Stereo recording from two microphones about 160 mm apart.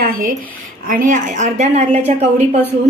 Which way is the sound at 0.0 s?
60° right (ahead or behind).